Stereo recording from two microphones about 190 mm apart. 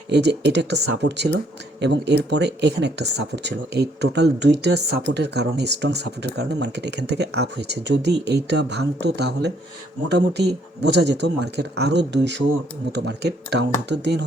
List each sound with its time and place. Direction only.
0.1 s speech: 65° right (ahead or behind)